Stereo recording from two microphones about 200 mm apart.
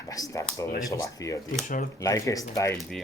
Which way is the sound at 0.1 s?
15° left (ahead or behind).